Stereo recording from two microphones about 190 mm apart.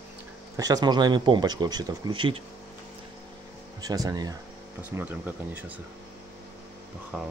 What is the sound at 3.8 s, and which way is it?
Speech, 20° right (ahead or behind).